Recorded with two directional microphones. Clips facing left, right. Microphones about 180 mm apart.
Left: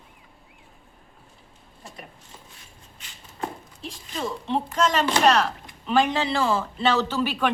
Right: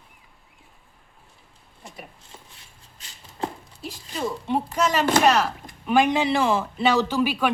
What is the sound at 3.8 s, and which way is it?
Speech, 10° right (ahead or behind).